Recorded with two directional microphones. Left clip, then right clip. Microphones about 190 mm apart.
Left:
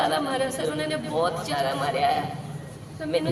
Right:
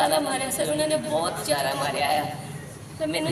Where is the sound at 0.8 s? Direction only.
20° left (ahead or behind).